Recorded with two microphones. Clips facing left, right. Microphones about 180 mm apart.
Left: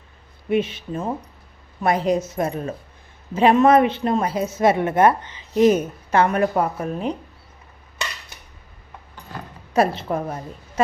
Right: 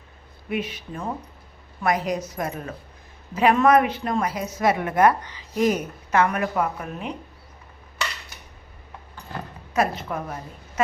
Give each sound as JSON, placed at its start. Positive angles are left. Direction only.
{"t": 0.5, "sound": "speech", "side_deg": 25}
{"t": 9.7, "sound": "a woman's voice", "side_deg": 30}